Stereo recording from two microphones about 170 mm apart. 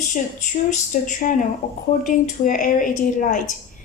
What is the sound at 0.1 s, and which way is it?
Speech, 45° left (ahead or behind).